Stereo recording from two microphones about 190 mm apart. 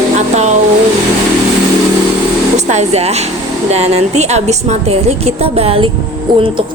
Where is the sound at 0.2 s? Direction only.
35° right (ahead or behind).